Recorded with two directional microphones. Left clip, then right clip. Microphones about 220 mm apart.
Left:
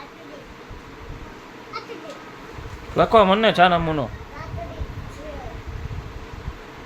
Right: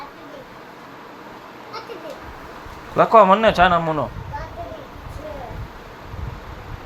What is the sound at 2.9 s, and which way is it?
Speech, 25° left (ahead or behind).